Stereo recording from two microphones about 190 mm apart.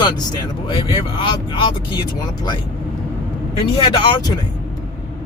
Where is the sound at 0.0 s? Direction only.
20° left (ahead or behind).